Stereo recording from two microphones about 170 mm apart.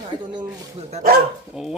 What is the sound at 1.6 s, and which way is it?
Speech, 5° right (ahead or behind).